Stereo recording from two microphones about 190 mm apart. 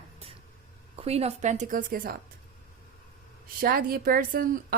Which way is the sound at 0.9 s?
30° right (ahead or behind).